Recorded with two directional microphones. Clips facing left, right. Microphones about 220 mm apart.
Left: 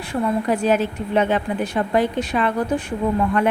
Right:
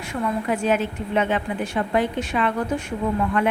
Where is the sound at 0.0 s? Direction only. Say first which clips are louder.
Left 4 dB; 35° left (ahead or behind).